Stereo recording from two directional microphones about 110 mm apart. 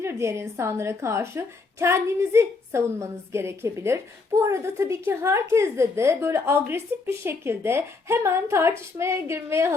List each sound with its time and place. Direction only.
0.0 s a woman's voice: 25° right (ahead or behind)